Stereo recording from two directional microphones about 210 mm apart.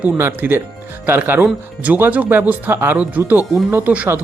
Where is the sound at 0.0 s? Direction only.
10° right (ahead or behind).